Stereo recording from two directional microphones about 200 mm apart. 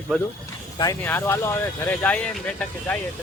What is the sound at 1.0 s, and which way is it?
Speech, 10° left (ahead or behind).